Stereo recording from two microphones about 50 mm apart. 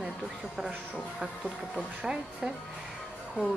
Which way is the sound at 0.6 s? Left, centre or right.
Centre.